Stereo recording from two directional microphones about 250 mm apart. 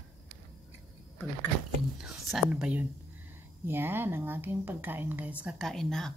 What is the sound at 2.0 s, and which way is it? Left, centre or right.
A woman's voice, centre.